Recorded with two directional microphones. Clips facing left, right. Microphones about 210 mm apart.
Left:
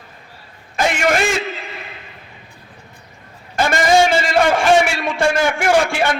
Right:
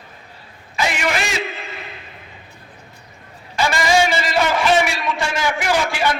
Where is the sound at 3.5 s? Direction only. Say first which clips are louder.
Left 3 dB; 50° left (ahead or behind).